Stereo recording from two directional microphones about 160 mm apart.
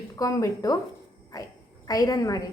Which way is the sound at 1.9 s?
25° left (ahead or behind).